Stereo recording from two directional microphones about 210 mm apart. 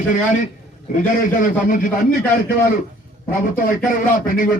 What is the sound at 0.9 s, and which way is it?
Speech, 40° left (ahead or behind).